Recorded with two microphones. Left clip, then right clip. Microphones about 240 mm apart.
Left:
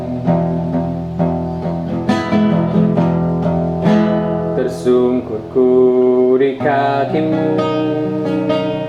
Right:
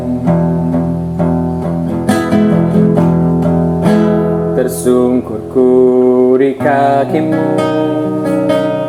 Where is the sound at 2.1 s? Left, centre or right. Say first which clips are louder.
Right 4 dB; right.